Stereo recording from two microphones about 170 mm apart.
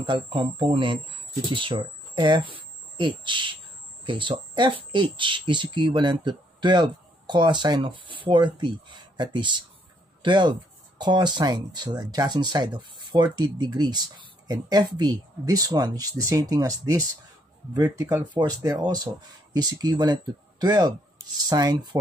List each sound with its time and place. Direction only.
0.0 s speech: 30° right (ahead or behind)